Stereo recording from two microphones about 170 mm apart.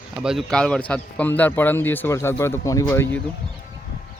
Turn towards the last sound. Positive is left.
turn(degrees=15)  # may be behind; listen again after turning